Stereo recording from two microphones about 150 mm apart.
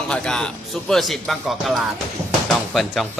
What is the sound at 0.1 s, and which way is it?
Speech, 5° left (ahead or behind).